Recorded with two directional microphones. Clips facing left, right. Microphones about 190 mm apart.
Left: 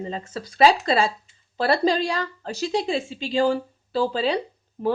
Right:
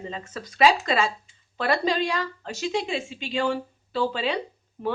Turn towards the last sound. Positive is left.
turn(degrees=35)  # may be behind; listen again after turning